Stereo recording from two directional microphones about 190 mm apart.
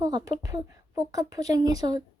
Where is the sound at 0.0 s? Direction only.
20° right (ahead or behind).